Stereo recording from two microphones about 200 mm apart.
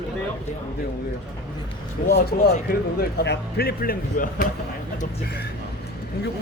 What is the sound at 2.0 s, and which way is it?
Speech, 50° left (ahead or behind).